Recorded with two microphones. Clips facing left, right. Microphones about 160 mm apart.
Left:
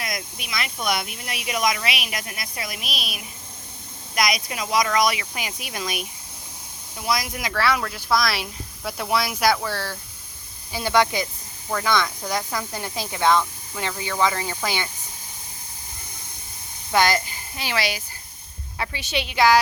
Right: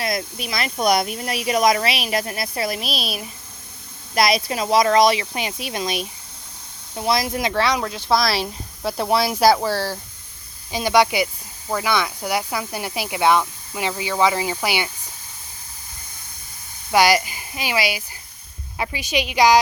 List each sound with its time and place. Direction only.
0.0 s speech: 35° right (ahead or behind)
10.7 s speech: 15° right (ahead or behind)
16.9 s speech: 10° right (ahead or behind)